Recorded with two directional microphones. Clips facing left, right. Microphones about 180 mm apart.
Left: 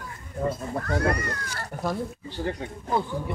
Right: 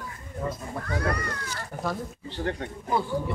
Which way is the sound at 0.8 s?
45° left (ahead or behind).